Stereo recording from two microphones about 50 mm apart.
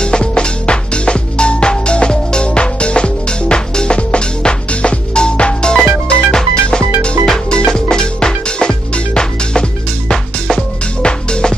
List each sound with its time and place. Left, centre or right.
0.0 s music: centre